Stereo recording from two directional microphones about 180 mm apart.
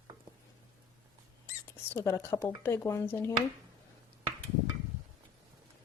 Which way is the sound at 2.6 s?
15° left (ahead or behind).